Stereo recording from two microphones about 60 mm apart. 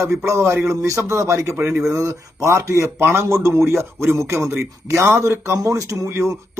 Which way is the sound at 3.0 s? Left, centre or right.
Right.